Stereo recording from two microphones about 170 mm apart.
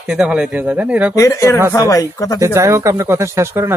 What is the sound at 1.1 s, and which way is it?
Speech, 20° left (ahead or behind).